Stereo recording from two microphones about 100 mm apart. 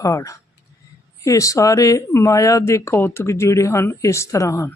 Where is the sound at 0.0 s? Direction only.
35° left (ahead or behind).